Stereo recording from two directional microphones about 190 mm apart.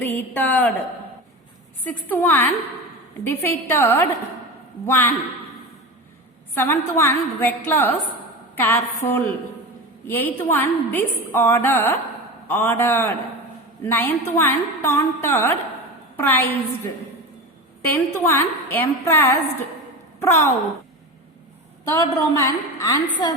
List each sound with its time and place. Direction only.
0.0 s a woman's voice: 10° left (ahead or behind)
1.8 s a woman's voice: 10° left (ahead or behind)
6.5 s a woman's voice: 10° left (ahead or behind)
17.9 s a woman's voice: 10° left (ahead or behind)
21.8 s a woman's voice: 15° left (ahead or behind)